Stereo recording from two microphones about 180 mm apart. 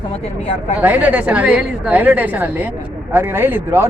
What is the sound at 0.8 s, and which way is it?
Speech, 10° right (ahead or behind).